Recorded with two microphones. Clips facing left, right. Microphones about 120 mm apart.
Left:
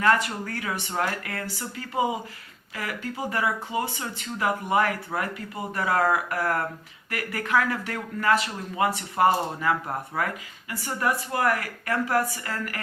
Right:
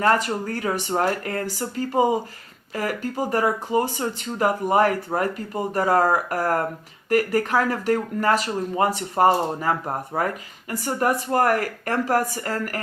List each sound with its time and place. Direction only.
0.0 s speech: 35° right (ahead or behind)